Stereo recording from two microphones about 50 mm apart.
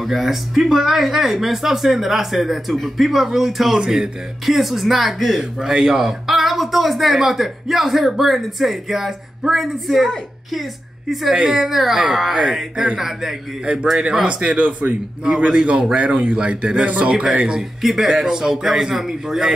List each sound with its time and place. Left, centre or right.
0.0 s a woman's voice: centre
11.3 s a man's voice: centre
11.6 s speech: centre
14.2 s a man's voice: centre
14.6 s a man's voice: right; by 19.5 s centre